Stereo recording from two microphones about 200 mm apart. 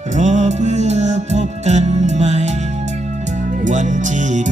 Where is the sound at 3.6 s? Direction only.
40° right (ahead or behind).